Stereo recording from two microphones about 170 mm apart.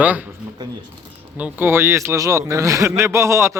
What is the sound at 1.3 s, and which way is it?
A man's voice, 10° right (ahead or behind).